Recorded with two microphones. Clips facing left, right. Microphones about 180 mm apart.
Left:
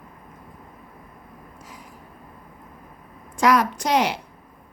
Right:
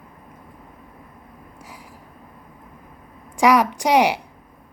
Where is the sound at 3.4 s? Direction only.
15° right (ahead or behind).